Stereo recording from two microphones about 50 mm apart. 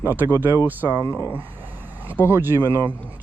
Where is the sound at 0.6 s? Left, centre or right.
Right.